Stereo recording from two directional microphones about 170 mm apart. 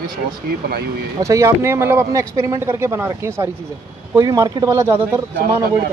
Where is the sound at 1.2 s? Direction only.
15° right (ahead or behind).